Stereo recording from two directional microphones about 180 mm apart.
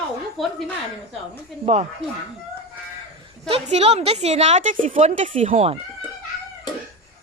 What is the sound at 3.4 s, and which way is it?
Speech, 35° right (ahead or behind).